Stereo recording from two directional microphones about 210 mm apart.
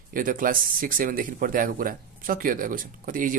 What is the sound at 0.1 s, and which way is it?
Speech, 40° right (ahead or behind).